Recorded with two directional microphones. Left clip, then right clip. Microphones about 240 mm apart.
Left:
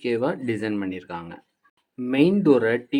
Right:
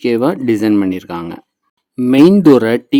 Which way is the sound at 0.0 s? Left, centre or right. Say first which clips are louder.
Right 10 dB; right.